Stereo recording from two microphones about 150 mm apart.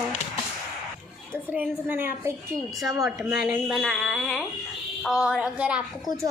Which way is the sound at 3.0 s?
5° right (ahead or behind).